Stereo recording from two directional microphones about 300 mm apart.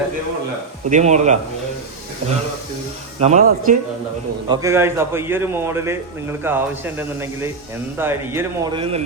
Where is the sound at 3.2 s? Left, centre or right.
Right.